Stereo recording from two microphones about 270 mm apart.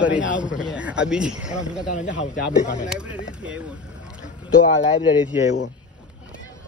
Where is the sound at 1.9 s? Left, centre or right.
Left.